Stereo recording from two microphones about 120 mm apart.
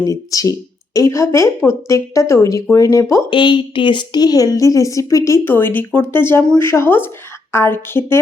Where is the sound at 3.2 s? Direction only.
40° left (ahead or behind); by 8.2 s 20° left (ahead or behind).